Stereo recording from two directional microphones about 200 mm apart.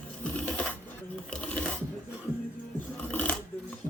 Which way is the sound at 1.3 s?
5° left (ahead or behind).